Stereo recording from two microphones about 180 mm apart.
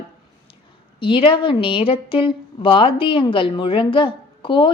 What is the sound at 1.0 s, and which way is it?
A woman's voice, 30° left (ahead or behind).